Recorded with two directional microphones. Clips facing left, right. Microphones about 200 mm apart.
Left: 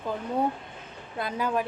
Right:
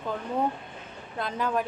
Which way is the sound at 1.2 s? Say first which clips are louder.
Even; 10° left (ahead or behind).